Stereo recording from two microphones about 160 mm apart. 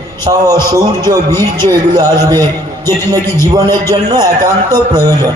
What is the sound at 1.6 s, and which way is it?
Speech, 25° right (ahead or behind).